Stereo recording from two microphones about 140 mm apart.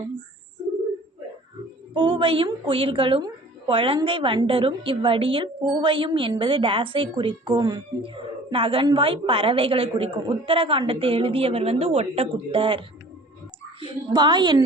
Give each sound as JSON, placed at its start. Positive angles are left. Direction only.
{"t": 1.9, "sound": "a woman's voice", "side_deg": -35}